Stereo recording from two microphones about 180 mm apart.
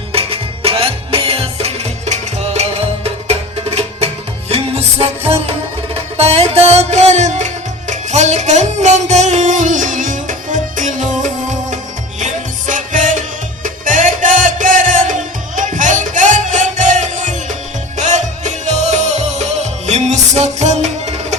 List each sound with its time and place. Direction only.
0.1 s music: 30° right (ahead or behind)